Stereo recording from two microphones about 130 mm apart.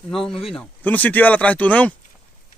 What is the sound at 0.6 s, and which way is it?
Speech, 15° left (ahead or behind).